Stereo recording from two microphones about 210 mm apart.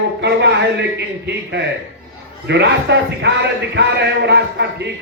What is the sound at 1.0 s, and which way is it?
A man's voice, 55° right (ahead or behind).